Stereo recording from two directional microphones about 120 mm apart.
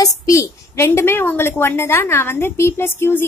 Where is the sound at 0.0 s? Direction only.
25° left (ahead or behind).